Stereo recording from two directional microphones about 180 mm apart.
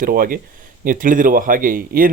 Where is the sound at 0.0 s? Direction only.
55° right (ahead or behind).